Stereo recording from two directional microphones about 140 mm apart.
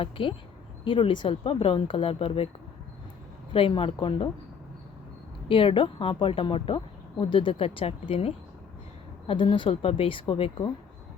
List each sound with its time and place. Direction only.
0.0 s speech: 40° left (ahead or behind)
3.5 s speech: 40° left (ahead or behind)
5.5 s speech: 40° left (ahead or behind)